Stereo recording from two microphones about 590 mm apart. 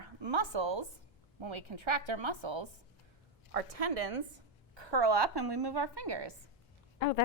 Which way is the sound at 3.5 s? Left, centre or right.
Right.